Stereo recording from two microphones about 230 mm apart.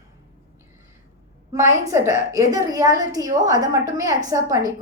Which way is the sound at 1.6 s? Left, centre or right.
Centre.